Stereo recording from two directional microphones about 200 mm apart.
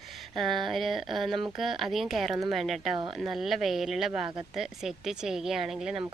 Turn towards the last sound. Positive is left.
turn(degrees=-5)  # may be behind; listen again after turning